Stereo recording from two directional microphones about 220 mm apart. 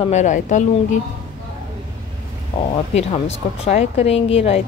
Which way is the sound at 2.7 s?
30° left (ahead or behind).